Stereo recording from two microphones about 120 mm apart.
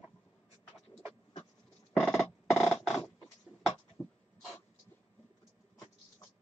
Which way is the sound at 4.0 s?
20° left (ahead or behind).